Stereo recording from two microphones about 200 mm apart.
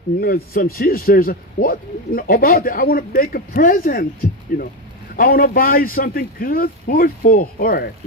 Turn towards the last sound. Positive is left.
turn(degrees=45)  # may be behind; listen again after turning